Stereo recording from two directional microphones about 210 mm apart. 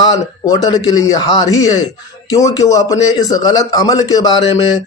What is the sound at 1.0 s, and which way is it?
Speech, 15° left (ahead or behind).